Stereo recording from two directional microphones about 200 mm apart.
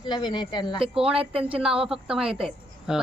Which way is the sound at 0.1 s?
20° left (ahead or behind).